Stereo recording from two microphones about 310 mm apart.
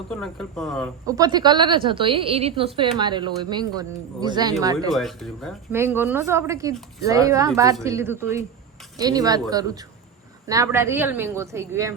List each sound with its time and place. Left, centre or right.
0.1 s speech: centre
1.0 s speech: centre
4.9 s speech: centre